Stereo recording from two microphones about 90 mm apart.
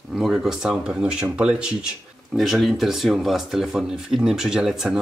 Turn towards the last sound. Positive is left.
turn(degrees=-5)  # may be behind; listen again after turning